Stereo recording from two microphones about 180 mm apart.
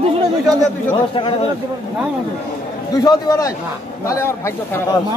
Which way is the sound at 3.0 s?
20° left (ahead or behind).